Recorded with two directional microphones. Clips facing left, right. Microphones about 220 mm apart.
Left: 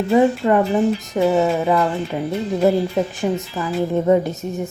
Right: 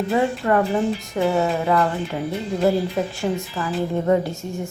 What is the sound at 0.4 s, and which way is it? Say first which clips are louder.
A woman's voice: left 3 dB; 20° left (ahead or behind).